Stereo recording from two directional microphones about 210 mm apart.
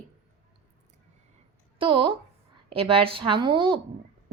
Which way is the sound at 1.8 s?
25° right (ahead or behind).